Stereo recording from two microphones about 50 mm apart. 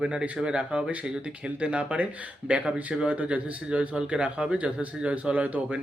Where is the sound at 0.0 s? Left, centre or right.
Right.